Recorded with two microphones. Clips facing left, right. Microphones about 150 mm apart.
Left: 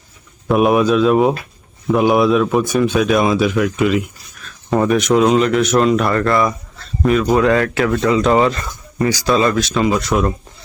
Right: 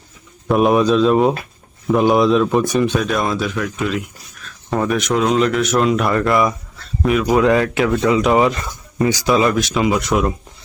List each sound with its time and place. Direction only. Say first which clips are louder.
0.4 s speech: left 1 dB; 5° left (ahead or behind)
7.4 s speech: even; 15° right (ahead or behind)